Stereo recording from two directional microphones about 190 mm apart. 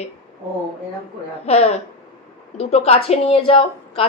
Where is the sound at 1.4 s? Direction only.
35° left (ahead or behind).